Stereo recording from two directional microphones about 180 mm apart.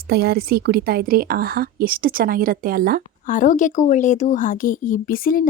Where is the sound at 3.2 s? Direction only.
45° left (ahead or behind).